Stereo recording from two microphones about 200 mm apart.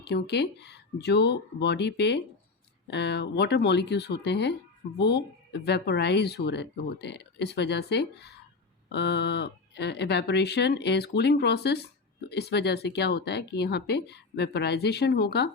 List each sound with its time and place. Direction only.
0.0 s speech: 55° left (ahead or behind)